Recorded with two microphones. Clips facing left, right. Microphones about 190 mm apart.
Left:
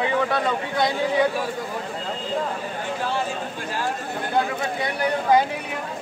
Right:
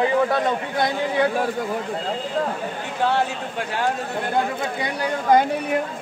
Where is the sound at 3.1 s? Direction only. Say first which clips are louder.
Right 3 dB; 65° right (ahead or behind).